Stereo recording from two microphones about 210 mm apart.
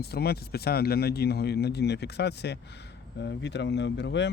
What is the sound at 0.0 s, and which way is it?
Speech, 50° left (ahead or behind).